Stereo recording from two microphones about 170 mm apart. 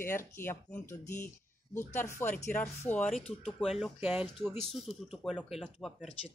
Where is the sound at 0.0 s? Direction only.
15° left (ahead or behind).